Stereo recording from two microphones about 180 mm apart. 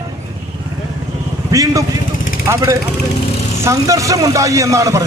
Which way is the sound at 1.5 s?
20° right (ahead or behind).